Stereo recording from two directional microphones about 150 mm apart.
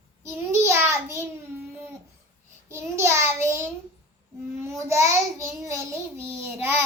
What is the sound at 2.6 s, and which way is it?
Speech, 15° right (ahead or behind).